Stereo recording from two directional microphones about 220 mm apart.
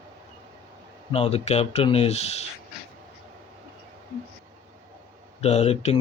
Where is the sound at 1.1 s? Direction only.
25° left (ahead or behind).